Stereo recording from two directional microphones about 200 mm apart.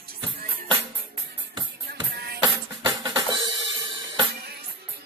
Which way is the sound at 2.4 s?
20° right (ahead or behind).